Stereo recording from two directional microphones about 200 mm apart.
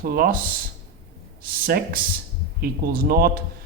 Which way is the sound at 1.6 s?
50° right (ahead or behind).